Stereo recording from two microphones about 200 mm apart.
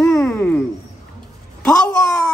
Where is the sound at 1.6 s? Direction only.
5° left (ahead or behind).